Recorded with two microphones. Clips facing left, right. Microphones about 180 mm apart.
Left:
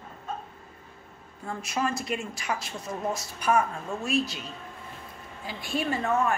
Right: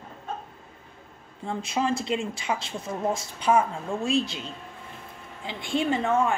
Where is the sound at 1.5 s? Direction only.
25° right (ahead or behind).